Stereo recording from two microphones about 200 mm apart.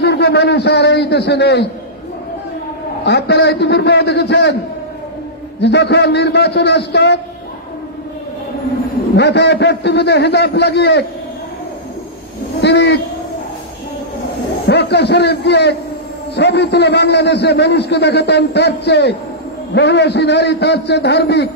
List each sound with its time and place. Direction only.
0.0 s a man's voice: 55° left (ahead or behind)
3.1 s a man's voice: 55° left (ahead or behind)
5.6 s a man's voice: 60° left (ahead or behind)
9.1 s a man's voice: 60° left (ahead or behind)
12.5 s a man's voice: 60° left (ahead or behind)
14.7 s a man's voice: 55° left (ahead or behind)